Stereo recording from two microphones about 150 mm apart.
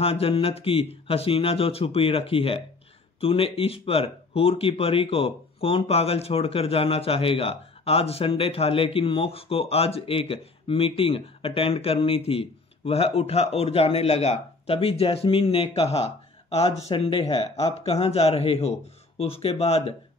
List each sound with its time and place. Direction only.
0.0 s speech: 40° left (ahead or behind)